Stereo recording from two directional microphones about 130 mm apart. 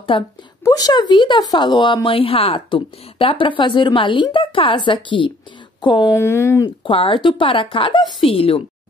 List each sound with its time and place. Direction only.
0.1 s a woman's voice: 40° left (ahead or behind)
0.7 s a woman's voice: 30° left (ahead or behind)
6.1 s speech: 20° left (ahead or behind)
6.8 s speech: 45° left (ahead or behind)